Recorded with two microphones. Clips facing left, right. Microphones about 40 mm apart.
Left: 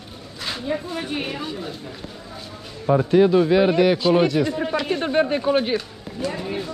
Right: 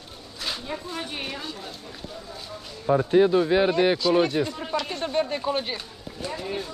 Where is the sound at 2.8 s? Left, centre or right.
Left.